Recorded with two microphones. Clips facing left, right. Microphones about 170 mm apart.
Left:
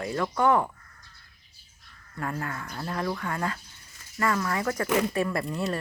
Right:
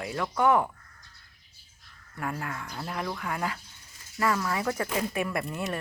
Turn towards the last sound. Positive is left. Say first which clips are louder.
# left 3 dB
turn(degrees=0)  # may be behind; listen again after turning